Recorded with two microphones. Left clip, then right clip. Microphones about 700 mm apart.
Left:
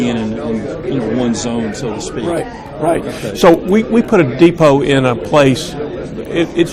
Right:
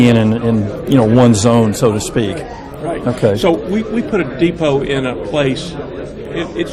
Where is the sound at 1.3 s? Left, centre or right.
Right.